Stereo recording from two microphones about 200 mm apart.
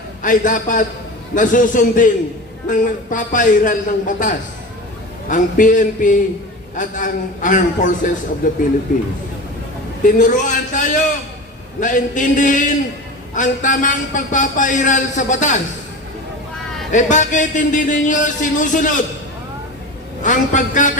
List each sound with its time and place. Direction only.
0.2 s a man's voice: 40° left (ahead or behind)
10.0 s a man's voice: 40° left (ahead or behind)
16.9 s a man's voice: 40° left (ahead or behind)
20.2 s a man's voice: 40° left (ahead or behind)